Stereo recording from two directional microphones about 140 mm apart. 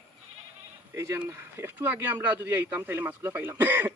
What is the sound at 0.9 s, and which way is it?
Speech, 20° right (ahead or behind).